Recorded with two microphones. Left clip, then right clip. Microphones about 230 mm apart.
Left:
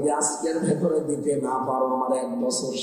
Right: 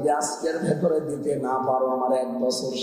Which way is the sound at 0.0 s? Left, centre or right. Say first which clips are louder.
Right 1 dB; right.